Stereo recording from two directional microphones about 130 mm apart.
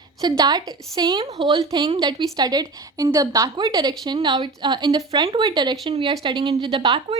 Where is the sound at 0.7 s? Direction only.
30° right (ahead or behind).